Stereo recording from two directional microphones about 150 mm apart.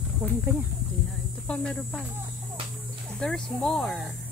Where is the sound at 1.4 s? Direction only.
10° left (ahead or behind).